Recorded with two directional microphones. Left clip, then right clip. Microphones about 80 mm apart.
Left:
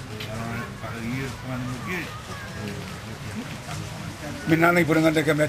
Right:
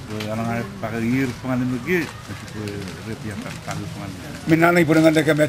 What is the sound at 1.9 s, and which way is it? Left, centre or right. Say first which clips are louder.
Speech: right 9 dB; right.